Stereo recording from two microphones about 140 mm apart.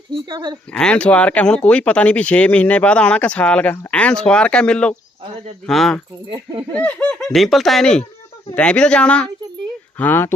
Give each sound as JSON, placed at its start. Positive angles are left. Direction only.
{"t": 0.1, "sound": "speech", "side_deg": -30}
{"t": 0.7, "sound": "speech", "side_deg": 5}
{"t": 6.3, "sound": "speech", "side_deg": -30}
{"t": 6.7, "sound": "speech", "side_deg": 10}